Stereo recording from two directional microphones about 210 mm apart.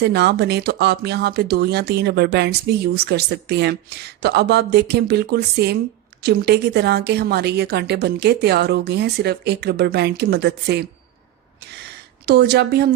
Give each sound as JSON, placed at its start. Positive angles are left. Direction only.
{"t": 0.0, "sound": "speech", "side_deg": -50}
{"t": 12.2, "sound": "speech", "side_deg": -50}